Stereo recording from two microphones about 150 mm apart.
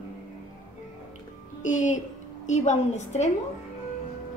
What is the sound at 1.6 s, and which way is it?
A woman's voice, 55° left (ahead or behind).